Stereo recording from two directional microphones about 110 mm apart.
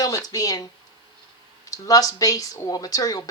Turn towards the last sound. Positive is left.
turn(degrees=35)  # may be behind; listen again after turning